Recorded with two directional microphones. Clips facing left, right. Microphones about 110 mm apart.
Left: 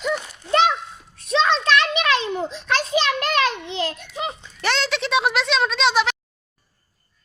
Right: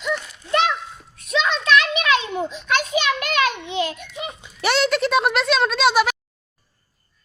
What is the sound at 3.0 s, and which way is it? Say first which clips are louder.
Children playing: even; 35° left (ahead or behind).